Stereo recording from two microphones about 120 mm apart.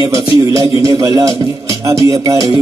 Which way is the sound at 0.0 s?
30° right (ahead or behind).